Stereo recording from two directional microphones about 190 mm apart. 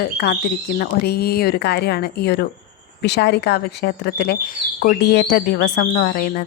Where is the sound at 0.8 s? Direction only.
55° left (ahead or behind).